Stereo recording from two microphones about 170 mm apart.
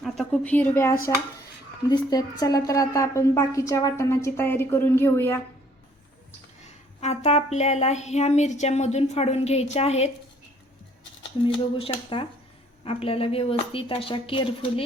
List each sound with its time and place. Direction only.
0.0 s a woman's voice: 5° left (ahead or behind)
1.9 s a woman's voice: 25° left (ahead or behind)
7.0 s speech: 40° left (ahead or behind)
11.4 s speech: 30° left (ahead or behind)